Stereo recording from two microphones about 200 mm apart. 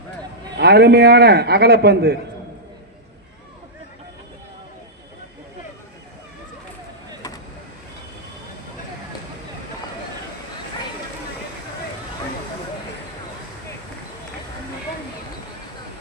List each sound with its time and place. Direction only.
0.6 s a man's voice: 55° right (ahead or behind)